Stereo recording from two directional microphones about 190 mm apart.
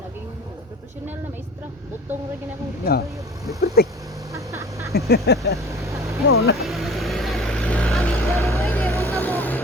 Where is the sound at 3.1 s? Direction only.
15° right (ahead or behind).